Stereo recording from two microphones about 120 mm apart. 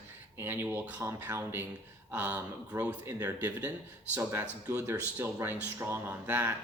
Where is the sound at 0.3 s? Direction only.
15° right (ahead or behind).